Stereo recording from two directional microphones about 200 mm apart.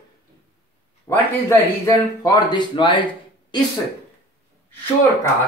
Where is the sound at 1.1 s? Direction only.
15° left (ahead or behind).